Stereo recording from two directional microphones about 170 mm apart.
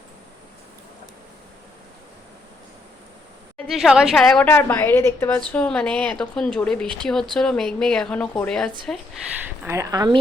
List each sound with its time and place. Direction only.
3.7 s a woman's voice: centre (ahead or behind)
9.6 s speech: 20° right (ahead or behind)